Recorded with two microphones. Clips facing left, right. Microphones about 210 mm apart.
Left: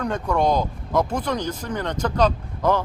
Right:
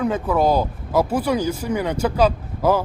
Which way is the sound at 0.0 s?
5° right (ahead or behind).